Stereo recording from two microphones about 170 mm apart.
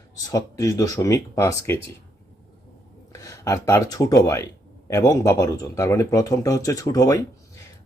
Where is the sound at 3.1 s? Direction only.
20° left (ahead or behind).